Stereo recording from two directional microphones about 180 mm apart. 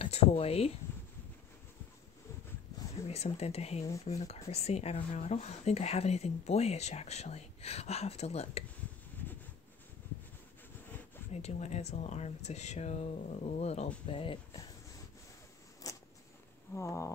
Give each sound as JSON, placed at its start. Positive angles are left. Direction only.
{"t": 0.0, "sound": "speech", "side_deg": 35}
{"t": 3.1, "sound": "speech", "side_deg": 35}
{"t": 11.3, "sound": "speech", "side_deg": 35}
{"t": 15.8, "sound": "a sound", "side_deg": 20}